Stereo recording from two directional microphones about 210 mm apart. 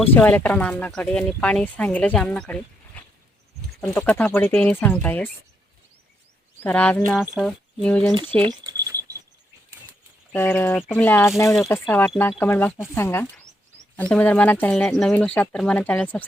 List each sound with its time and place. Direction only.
0.0 s speech: 10° left (ahead or behind)
6.6 s speech: 5° left (ahead or behind)
8.4 s a sound: 20° right (ahead or behind)
10.3 s speech: 10° left (ahead or behind)